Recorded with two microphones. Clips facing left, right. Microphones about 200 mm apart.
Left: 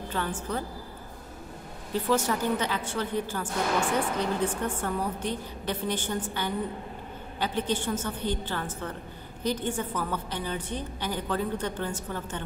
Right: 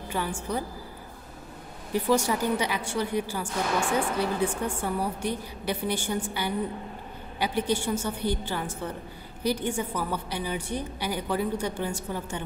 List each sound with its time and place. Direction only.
0.1 s a woman's voice: 10° right (ahead or behind)
1.9 s a woman's voice: 15° right (ahead or behind)